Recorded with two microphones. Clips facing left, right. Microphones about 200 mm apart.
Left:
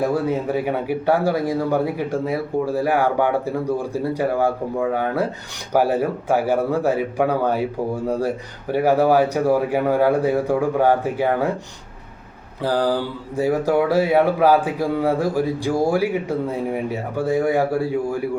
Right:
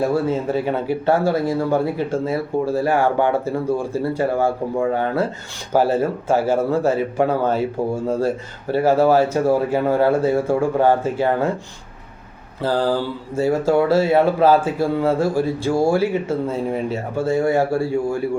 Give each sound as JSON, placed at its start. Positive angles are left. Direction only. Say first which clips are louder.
{"t": 0.0, "sound": "a man's voice", "louder": "right 1 dB", "side_deg": 15}
{"t": 12.6, "sound": "a man's voice", "louder": "right 1 dB", "side_deg": 15}